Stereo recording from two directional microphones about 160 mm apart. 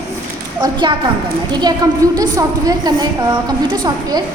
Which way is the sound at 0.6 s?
30° right (ahead or behind).